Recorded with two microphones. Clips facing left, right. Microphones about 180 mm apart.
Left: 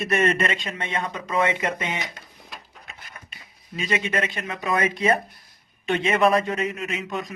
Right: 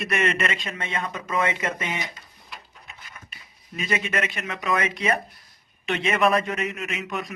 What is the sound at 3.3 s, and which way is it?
Speech, 30° left (ahead or behind).